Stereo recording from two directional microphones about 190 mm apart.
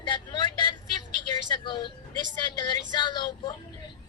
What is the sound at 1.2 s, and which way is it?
Vehicle, 25° left (ahead or behind).